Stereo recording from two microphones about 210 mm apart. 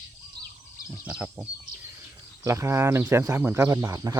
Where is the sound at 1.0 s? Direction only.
10° right (ahead or behind).